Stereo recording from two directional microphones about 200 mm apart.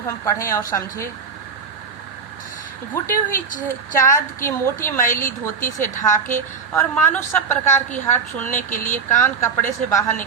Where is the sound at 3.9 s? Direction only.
15° left (ahead or behind).